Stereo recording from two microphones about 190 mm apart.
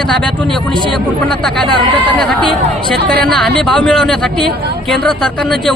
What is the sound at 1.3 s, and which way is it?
Speech, 5° left (ahead or behind).